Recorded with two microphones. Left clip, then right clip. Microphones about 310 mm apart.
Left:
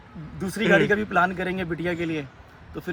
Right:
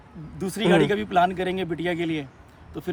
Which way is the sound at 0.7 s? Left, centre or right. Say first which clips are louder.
Left 1 dB; right.